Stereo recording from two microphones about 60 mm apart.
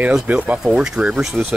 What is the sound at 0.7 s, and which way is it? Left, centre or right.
Speech, centre.